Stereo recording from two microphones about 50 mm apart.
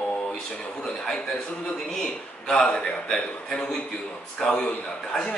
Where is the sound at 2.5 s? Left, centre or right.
Centre.